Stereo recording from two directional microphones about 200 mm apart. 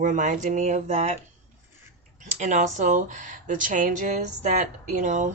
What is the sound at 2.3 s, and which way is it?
Speech, 35° right (ahead or behind).